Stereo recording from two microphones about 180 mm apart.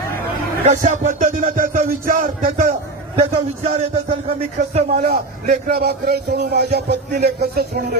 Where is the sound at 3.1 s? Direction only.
35° right (ahead or behind).